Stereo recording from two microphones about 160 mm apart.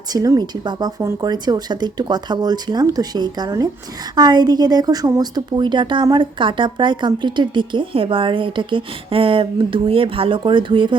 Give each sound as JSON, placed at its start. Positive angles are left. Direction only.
{"t": 0.1, "sound": "a woman's voice", "side_deg": -25}